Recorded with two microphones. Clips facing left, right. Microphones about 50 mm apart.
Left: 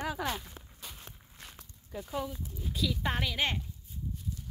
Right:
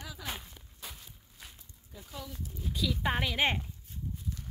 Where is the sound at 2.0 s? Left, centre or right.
Left.